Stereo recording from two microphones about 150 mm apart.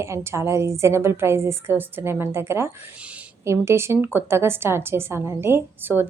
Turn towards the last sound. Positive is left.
turn(degrees=-15)  # may be behind; listen again after turning